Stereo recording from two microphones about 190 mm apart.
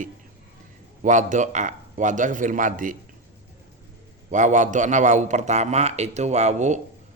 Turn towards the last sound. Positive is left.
turn(degrees=-35)  # may be behind; listen again after turning